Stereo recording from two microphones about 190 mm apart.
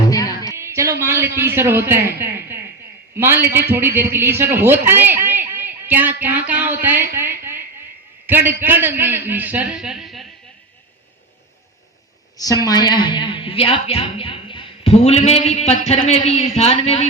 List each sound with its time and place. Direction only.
0.1 s music: 20° left (ahead or behind)
0.5 s a man's voice: 15° right (ahead or behind)
12.6 s speech: 20° left (ahead or behind)